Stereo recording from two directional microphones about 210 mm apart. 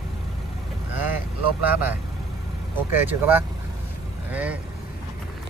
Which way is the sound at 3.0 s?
10° right (ahead or behind).